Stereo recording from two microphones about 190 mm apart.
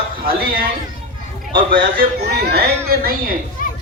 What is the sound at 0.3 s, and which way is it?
Speech, 50° right (ahead or behind).